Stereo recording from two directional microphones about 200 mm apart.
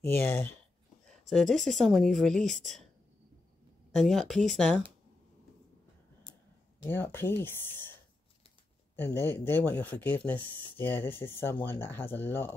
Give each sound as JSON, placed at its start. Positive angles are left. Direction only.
{"t": 1.3, "sound": "speech", "side_deg": 0}
{"t": 3.9, "sound": "speech", "side_deg": 0}
{"t": 6.8, "sound": "speech", "side_deg": 10}
{"t": 8.9, "sound": "speech", "side_deg": 10}